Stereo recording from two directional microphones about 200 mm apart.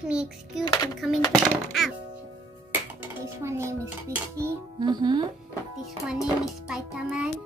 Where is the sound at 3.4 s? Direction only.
15° right (ahead or behind).